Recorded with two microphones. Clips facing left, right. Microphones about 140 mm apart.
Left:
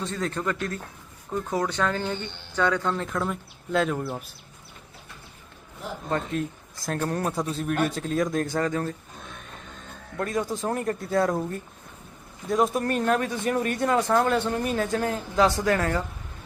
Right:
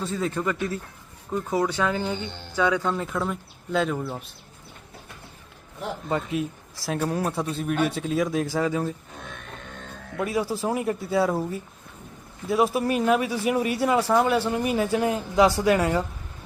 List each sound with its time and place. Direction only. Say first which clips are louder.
0.0 s a man's voice: right 2 dB; 5° right (ahead or behind)
6.1 s a man's voice: even; 10° right (ahead or behind)
10.2 s speech: right 2 dB; 5° right (ahead or behind)